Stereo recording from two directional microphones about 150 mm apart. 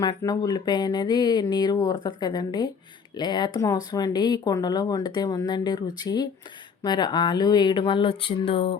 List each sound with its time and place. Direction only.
0.0 s speech: 25° left (ahead or behind)